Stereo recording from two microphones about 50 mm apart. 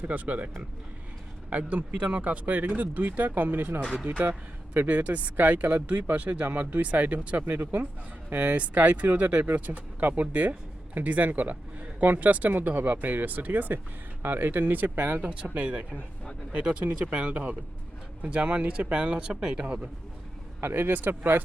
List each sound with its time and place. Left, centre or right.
0.0 s speech: right
15.2 s speech: right
20.6 s speech: right